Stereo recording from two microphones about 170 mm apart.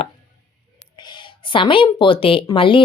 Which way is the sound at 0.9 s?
25° left (ahead or behind).